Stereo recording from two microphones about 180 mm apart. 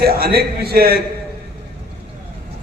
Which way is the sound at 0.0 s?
60° right (ahead or behind).